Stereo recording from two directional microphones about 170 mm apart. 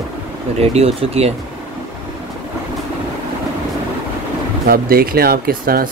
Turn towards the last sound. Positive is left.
turn(degrees=-60)  # may be behind; listen again after turning